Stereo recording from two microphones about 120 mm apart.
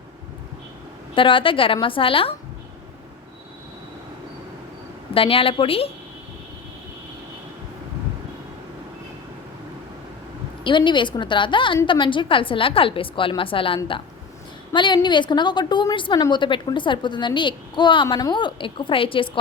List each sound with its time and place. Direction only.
1.1 s a woman's voice: 45° left (ahead or behind)
5.1 s a woman's voice: 50° left (ahead or behind)
10.6 s a woman's voice: 40° left (ahead or behind)